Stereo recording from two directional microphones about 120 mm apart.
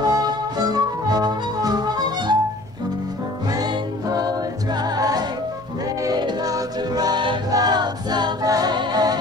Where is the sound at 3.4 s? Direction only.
35° right (ahead or behind).